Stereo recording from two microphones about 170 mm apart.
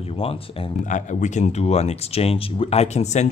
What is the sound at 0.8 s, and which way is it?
A man's voice, 45° left (ahead or behind).